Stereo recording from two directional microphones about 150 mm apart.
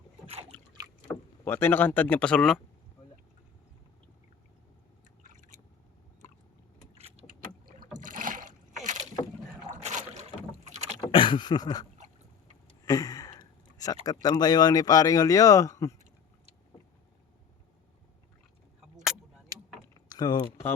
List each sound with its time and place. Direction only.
1.0 s speech: 15° left (ahead or behind)
5.2 s drip: 55° right (ahead or behind)
7.9 s boat: 65° right (ahead or behind)
11.1 s a sound: 35° left (ahead or behind)
12.8 s speech: 25° left (ahead or behind)
19.5 s vehicle: 25° right (ahead or behind)
20.1 s speech: 25° left (ahead or behind)